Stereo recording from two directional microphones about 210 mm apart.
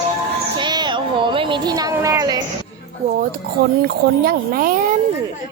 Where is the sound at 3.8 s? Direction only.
45° right (ahead or behind).